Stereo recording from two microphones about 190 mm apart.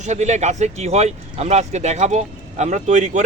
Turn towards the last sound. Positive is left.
turn(degrees=-40)  # may be behind; listen again after turning